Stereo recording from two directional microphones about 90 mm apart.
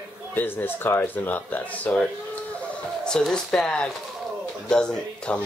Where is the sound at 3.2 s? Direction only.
5° left (ahead or behind).